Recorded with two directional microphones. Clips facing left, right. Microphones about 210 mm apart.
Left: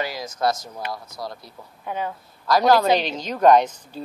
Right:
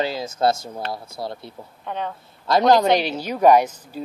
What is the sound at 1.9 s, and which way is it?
Speech, 5° left (ahead or behind).